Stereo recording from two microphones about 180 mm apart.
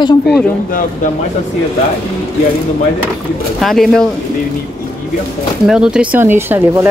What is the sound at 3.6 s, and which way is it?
Speech, centre (ahead or behind).